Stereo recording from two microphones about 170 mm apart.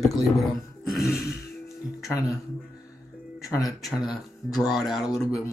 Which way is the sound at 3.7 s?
Centre (ahead or behind).